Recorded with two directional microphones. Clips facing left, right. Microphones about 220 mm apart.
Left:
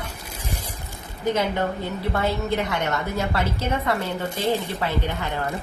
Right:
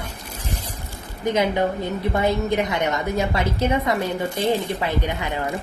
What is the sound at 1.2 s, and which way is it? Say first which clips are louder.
A woman's voice: right 3 dB; 15° right (ahead or behind).